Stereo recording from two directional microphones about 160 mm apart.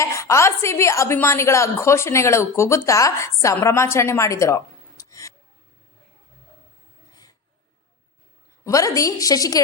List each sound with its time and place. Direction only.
0.0 s a woman's voice: 20° left (ahead or behind)
8.6 s a woman's voice: 20° left (ahead or behind)